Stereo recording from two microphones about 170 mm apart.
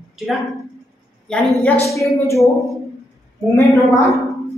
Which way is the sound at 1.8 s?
15° left (ahead or behind).